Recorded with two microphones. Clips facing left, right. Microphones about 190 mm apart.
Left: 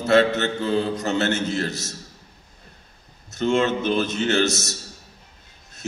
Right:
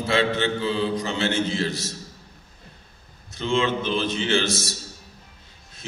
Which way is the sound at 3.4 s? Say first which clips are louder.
Left 3 dB; 45° left (ahead or behind).